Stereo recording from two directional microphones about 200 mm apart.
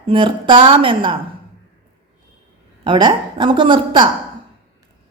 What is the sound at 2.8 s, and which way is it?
A woman's voice, 25° right (ahead or behind).